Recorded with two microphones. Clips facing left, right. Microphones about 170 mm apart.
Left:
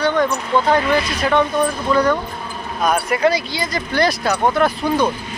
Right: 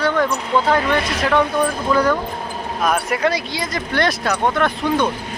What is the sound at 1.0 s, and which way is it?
Speech, 80° right.